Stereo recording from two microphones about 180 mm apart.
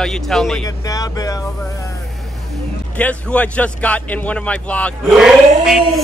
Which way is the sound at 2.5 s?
5° left (ahead or behind).